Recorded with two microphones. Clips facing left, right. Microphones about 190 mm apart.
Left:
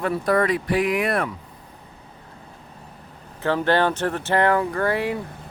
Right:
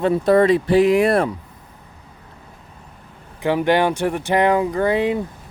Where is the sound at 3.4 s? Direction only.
15° right (ahead or behind).